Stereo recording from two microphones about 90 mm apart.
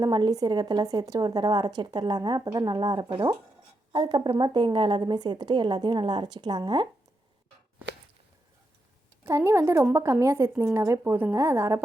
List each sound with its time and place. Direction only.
0.0 s a woman's voice: 50° right (ahead or behind)
9.2 s a woman's voice: 30° right (ahead or behind)